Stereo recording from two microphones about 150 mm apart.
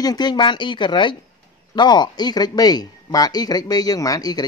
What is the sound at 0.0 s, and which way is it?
Speech, 25° left (ahead or behind).